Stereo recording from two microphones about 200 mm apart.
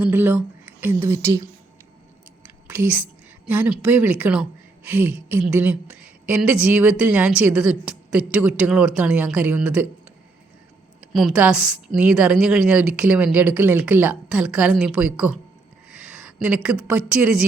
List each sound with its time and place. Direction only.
0.0 s speech: 10° right (ahead or behind)
2.4 s whispering: 10° right (ahead or behind)
3.4 s a woman's voice: 10° right (ahead or behind)
11.1 s a woman's voice: centre (ahead or behind)
15.9 s a sound: 5° right (ahead or behind)
17.1 s a woman's voice: 5° right (ahead or behind)